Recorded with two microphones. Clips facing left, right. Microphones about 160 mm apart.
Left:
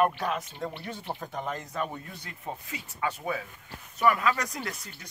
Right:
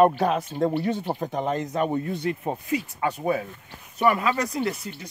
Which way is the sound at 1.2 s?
20° right (ahead or behind).